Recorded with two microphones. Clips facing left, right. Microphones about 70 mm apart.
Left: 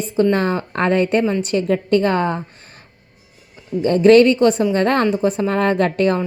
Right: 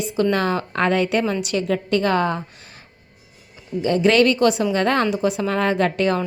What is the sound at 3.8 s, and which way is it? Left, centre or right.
A woman's voice, left.